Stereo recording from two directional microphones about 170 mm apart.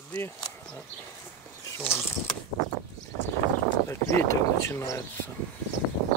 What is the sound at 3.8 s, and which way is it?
Speech, 15° left (ahead or behind).